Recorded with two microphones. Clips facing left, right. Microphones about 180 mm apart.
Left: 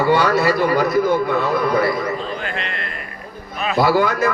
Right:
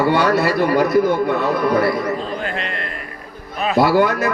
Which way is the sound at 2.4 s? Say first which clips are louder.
Right 2 dB; 40° right (ahead or behind).